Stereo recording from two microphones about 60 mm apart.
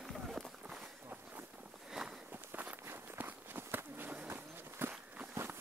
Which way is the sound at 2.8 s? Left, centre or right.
Right.